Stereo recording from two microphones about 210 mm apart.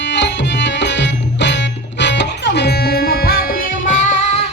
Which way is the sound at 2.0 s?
55° left (ahead or behind).